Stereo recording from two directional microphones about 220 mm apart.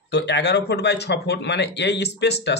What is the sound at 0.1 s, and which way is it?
Speech, 50° left (ahead or behind).